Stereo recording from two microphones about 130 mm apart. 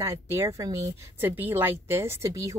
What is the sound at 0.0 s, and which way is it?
Speech, 20° right (ahead or behind).